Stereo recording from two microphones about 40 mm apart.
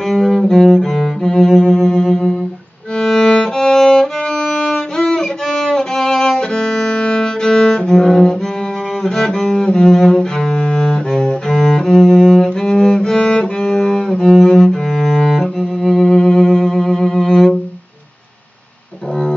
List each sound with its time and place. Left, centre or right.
0.1 s cello: centre
3.0 s music: centre
4.4 s music: left
9.0 s cello: centre
11.4 s cello: centre
12.4 s music: centre
14.3 s cello: centre